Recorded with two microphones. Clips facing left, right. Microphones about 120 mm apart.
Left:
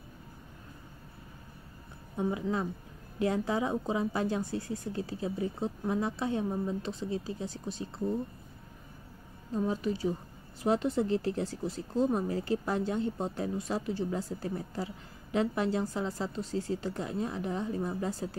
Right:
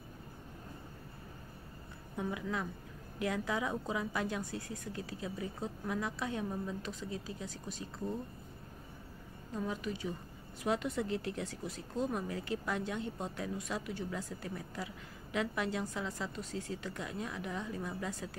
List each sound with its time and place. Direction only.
2.1 s a woman's voice: 25° left (ahead or behind)
9.5 s speech: 30° left (ahead or behind)